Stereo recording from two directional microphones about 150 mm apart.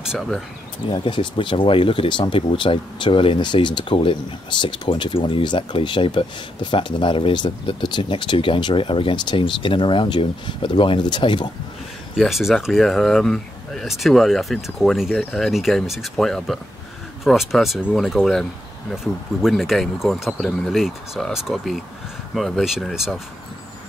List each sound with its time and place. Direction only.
0.0 s speech: 5° right (ahead or behind)
0.8 s speech: 35° left (ahead or behind)
12.2 s speech: centre (ahead or behind)